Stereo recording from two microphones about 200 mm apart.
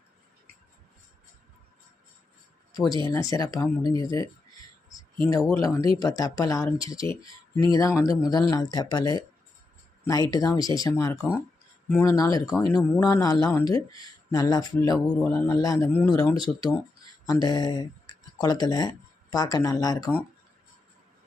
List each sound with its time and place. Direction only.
2.7 s speech: 20° left (ahead or behind)
5.3 s speech: 15° left (ahead or behind)
16.4 s speech: 20° left (ahead or behind)